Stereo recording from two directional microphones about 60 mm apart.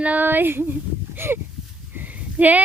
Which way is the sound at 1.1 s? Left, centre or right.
Right.